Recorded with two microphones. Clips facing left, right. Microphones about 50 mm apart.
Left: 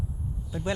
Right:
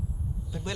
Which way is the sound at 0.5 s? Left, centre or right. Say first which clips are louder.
Left 5 dB; centre.